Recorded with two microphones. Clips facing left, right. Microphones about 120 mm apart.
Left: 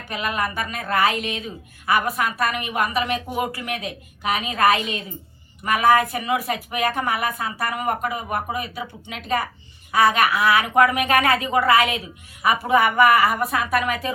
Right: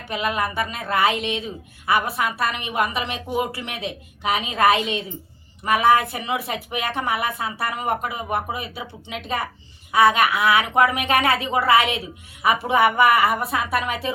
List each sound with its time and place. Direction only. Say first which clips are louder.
0.1 s a woman's voice: right 1 dB; 25° right (ahead or behind)
11.3 s speech: left 1 dB; 40° left (ahead or behind)
11.6 s a woman's voice: even; 30° right (ahead or behind)